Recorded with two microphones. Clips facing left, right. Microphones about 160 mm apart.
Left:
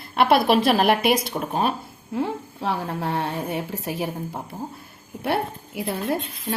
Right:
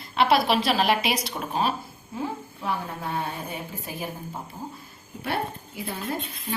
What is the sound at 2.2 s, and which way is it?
A woman's voice, 85° left.